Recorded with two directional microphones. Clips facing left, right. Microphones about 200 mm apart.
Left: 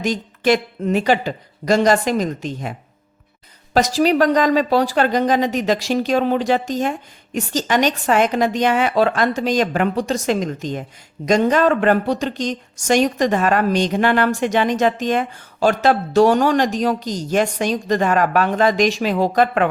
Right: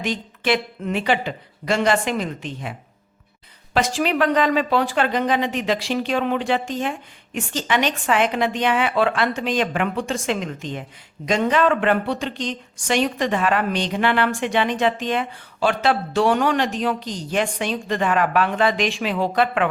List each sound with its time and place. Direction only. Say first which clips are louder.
0.0 s a woman's voice: left 5 dB; 40° left (ahead or behind)
3.8 s a woman's voice: left 5 dB; 40° left (ahead or behind)